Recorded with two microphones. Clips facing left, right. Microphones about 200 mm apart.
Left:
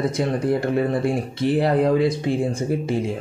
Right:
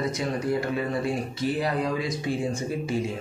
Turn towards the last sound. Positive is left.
turn(degrees=55)  # may be behind; listen again after turning